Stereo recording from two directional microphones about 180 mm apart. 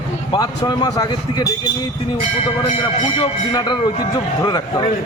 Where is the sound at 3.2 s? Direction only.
25° left (ahead or behind).